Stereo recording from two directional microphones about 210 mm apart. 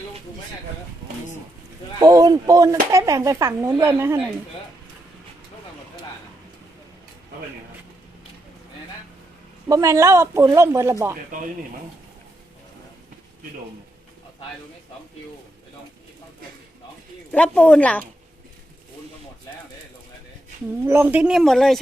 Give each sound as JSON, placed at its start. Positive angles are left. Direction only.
{"t": 2.0, "sound": "speech", "side_deg": -15}
{"t": 9.6, "sound": "speech", "side_deg": -15}
{"t": 17.3, "sound": "speech", "side_deg": 5}
{"t": 20.8, "sound": "speech", "side_deg": -10}